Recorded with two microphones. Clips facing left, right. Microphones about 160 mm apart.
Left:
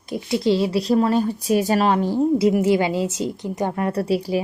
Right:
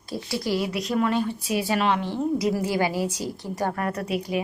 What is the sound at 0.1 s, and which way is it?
A woman's voice, 20° left (ahead or behind).